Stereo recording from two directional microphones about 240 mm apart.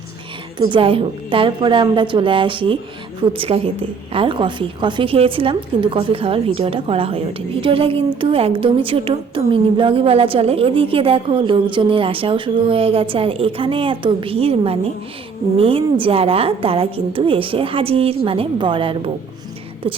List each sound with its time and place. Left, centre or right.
0.7 s a woman's voice: right